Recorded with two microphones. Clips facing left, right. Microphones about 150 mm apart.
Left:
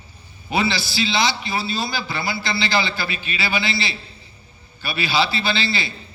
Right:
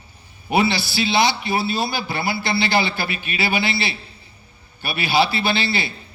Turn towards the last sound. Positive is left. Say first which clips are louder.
# right 2 dB
turn(degrees=-60)  # may be behind; listen again after turning